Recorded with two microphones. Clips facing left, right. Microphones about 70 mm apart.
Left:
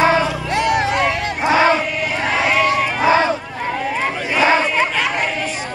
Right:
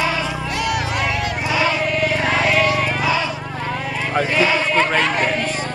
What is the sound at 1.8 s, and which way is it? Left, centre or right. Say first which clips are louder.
Choir: right 2 dB; centre.